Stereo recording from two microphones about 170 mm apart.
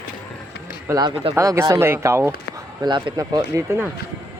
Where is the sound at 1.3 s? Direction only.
15° right (ahead or behind).